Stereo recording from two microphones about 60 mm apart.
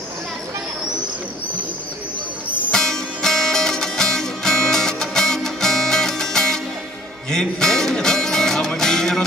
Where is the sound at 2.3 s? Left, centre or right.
Right.